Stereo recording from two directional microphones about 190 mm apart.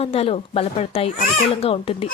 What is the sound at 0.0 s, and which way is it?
Speech, 30° left (ahead or behind).